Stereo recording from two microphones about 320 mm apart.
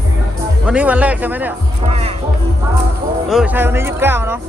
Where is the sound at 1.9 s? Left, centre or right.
Centre.